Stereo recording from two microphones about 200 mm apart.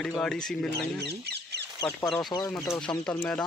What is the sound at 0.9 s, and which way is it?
Speech, 55° right (ahead or behind).